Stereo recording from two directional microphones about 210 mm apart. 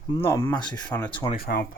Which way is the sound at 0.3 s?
10° left (ahead or behind).